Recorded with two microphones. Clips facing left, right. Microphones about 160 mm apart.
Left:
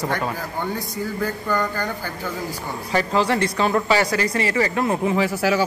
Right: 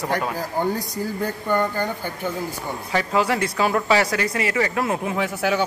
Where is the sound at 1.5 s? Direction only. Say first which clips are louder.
Right 4 dB; 20° right (ahead or behind).